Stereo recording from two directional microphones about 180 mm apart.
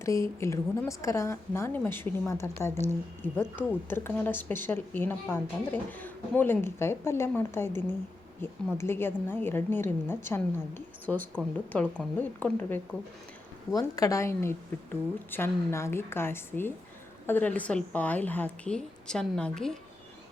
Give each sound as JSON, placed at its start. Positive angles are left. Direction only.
{"t": 0.0, "sound": "a woman's voice", "side_deg": 15}